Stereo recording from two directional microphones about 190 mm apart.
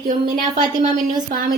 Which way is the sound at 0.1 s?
45° right (ahead or behind).